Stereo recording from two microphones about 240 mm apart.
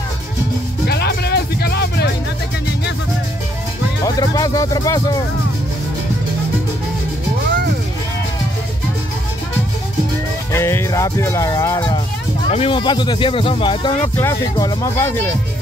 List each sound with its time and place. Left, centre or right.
0.8 s music: left
4.0 s speech: centre
10.5 s speech: centre
12.4 s speech: left